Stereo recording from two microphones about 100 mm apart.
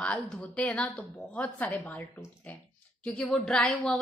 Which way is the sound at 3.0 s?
15° left (ahead or behind).